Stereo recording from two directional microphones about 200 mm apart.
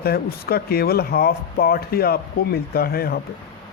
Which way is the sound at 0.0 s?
50° left (ahead or behind).